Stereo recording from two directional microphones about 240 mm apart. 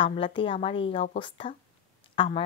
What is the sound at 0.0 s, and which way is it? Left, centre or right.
Speech, left.